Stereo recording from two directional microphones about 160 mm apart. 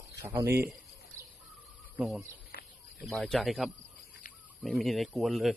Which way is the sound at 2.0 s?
5° right (ahead or behind).